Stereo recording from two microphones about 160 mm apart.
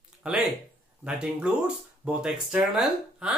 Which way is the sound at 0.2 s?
5° right (ahead or behind).